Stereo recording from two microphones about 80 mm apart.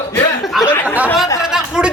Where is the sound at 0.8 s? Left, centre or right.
Centre.